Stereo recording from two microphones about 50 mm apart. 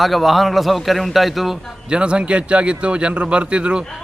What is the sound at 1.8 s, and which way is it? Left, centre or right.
A man's voice, centre.